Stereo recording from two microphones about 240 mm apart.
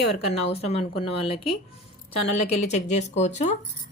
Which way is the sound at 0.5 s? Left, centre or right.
Left.